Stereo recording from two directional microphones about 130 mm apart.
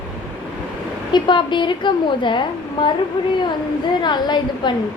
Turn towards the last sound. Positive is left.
turn(degrees=35)  # may be behind; listen again after turning